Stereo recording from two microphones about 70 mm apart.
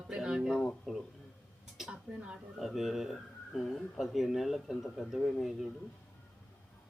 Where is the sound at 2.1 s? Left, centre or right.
Centre.